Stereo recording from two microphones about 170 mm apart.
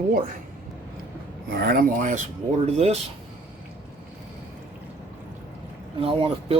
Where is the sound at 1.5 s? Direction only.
65° right (ahead or behind).